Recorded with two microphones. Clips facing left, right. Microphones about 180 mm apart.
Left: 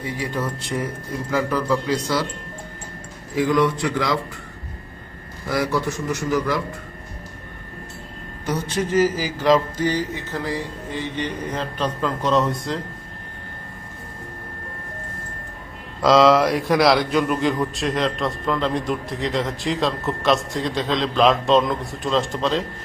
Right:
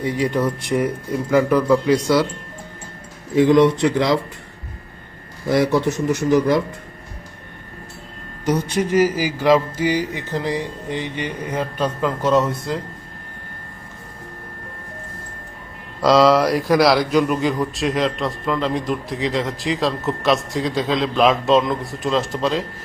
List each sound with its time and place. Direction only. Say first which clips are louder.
0.0 s speech: right 6 dB; 20° right (ahead or behind)
3.3 s a man's voice: right 6 dB; 25° right (ahead or behind)
5.5 s a man's voice: right 5 dB; 20° right (ahead or behind)
8.4 s speech: right 4 dB; 15° right (ahead or behind)
16.0 s speech: right 1 dB; centre (ahead or behind)